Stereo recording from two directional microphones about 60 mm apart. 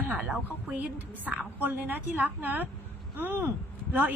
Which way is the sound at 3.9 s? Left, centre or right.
Right.